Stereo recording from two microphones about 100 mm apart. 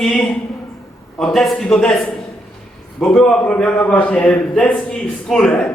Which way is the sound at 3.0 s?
5° left (ahead or behind).